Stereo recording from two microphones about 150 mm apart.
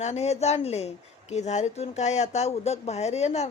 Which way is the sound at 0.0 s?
45° left (ahead or behind).